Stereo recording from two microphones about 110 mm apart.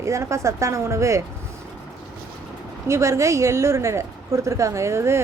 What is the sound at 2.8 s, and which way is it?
Speech, 25° right (ahead or behind).